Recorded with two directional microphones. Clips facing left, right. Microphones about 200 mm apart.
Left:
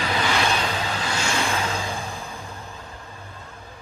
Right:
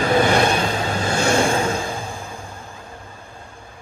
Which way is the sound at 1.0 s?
50° right (ahead or behind).